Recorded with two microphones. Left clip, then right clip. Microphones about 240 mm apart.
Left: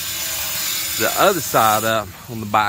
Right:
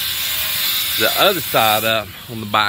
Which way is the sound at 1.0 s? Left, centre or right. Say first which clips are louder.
Even; left.